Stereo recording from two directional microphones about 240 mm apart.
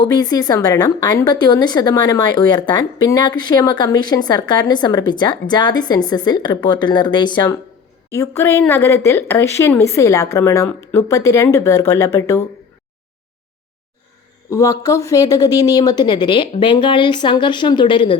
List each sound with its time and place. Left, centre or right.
0.0 s speech: centre
14.5 s speech: centre